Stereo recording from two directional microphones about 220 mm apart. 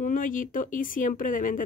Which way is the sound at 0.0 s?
35° left (ahead or behind).